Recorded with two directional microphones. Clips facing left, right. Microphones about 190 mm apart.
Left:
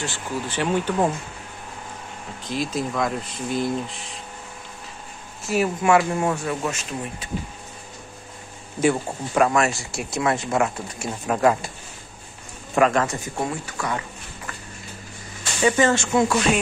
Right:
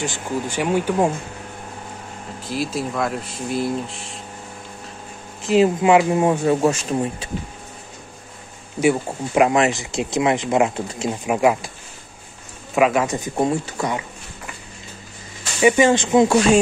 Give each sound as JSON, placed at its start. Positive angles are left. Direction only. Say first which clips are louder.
{"t": 0.0, "sound": "speech", "louder": "right 4 dB", "side_deg": -15}
{"t": 2.4, "sound": "speech", "louder": "right 1 dB", "side_deg": -5}
{"t": 5.4, "sound": "speech", "louder": "right 7 dB", "side_deg": -20}
{"t": 8.8, "sound": "speech", "louder": "right 2 dB", "side_deg": -10}
{"t": 12.7, "sound": "speech", "louder": "right 2 dB", "side_deg": -5}
{"t": 13.0, "sound": "speech", "louder": "right 5 dB", "side_deg": -20}
{"t": 15.6, "sound": "speech", "louder": "right 4 dB", "side_deg": -15}